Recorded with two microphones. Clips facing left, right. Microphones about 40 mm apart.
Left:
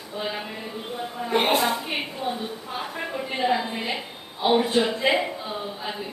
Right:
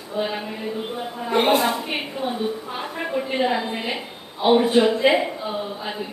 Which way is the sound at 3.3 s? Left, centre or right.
Centre.